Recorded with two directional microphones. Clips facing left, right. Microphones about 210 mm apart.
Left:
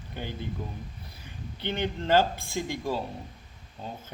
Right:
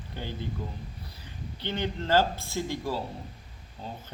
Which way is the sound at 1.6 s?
15° left (ahead or behind).